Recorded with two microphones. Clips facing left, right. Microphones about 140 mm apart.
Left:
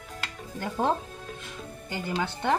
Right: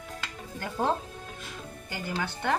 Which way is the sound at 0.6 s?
20° left (ahead or behind).